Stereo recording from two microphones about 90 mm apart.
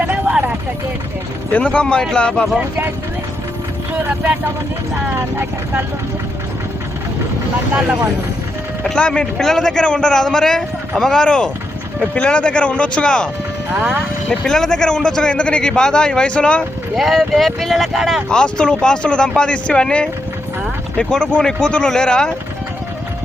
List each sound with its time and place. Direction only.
0.1 s vehicle: 15° right (ahead or behind)
1.5 s a man's voice: 10° left (ahead or behind)
2.6 s speech: 15° right (ahead or behind)
8.8 s a man's voice: 10° left (ahead or behind)
13.7 s speech: 15° right (ahead or behind)
14.3 s a man's voice: 5° left (ahead or behind)
16.9 s speech: centre (ahead or behind)
18.3 s a man's voice: 10° left (ahead or behind)